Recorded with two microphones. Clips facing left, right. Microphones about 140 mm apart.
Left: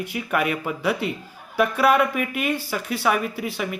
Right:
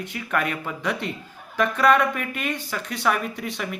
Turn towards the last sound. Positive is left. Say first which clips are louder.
# left 3 dB
turn(degrees=5)  # may be behind; listen again after turning